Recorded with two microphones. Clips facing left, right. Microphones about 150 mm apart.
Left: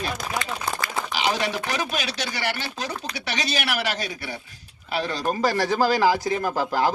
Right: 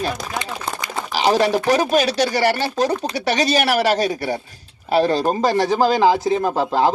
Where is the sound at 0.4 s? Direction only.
20° right (ahead or behind).